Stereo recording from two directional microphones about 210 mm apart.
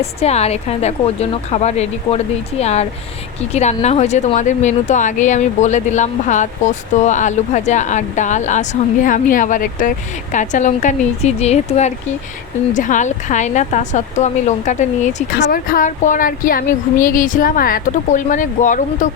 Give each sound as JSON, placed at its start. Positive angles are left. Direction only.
{"t": 0.0, "sound": "speech", "side_deg": 30}
{"t": 15.4, "sound": "speech", "side_deg": 45}